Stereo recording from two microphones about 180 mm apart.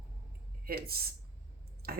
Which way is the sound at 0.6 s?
60° right (ahead or behind).